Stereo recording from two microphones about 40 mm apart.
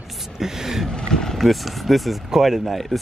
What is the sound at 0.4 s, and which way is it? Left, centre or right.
Speech, centre.